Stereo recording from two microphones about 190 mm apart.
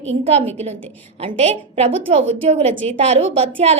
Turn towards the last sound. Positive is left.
turn(degrees=-35)  # may be behind; listen again after turning